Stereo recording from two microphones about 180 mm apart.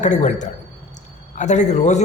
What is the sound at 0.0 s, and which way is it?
Speech, 40° left (ahead or behind).